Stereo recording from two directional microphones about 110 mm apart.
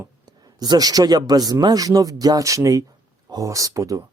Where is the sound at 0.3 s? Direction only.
35° right (ahead or behind).